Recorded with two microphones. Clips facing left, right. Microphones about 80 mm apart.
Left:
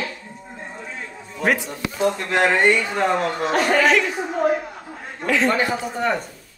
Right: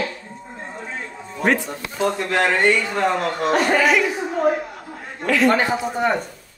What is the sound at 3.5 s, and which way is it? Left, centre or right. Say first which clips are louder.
Speech: right 1 dB; centre.